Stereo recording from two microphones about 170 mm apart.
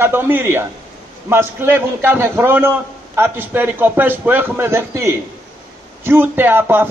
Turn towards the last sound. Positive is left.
turn(degrees=-15)  # may be behind; listen again after turning